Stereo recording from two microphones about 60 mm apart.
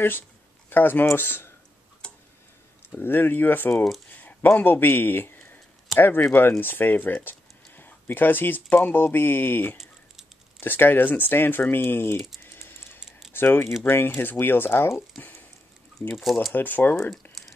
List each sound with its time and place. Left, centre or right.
0.7 s speech: left
2.0 s tick-tock: centre
3.0 s speech: left
4.2 s a sound: left
6.3 s speech: left
12.4 s typing: left
13.3 s speech: left
16.5 s speech: left